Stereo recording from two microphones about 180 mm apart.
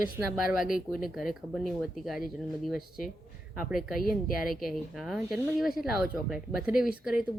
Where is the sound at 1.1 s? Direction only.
Centre (ahead or behind).